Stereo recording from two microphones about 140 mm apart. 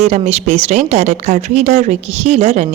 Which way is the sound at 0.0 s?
50° right (ahead or behind).